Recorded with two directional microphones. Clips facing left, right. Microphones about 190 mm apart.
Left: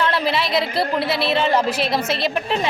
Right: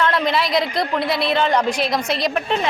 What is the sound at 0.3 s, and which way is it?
A woman's voice, centre (ahead or behind).